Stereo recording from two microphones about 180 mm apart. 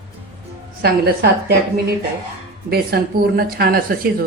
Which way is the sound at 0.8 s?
65° right (ahead or behind).